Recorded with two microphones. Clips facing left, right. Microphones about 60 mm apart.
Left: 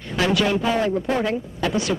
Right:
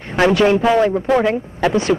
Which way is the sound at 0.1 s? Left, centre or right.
Right.